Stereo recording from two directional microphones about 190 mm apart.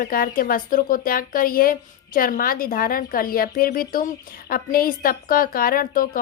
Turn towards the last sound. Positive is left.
turn(degrees=50)  # may be behind; listen again after turning